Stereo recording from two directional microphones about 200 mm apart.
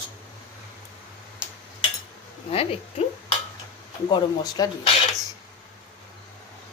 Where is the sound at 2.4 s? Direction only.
30° left (ahead or behind).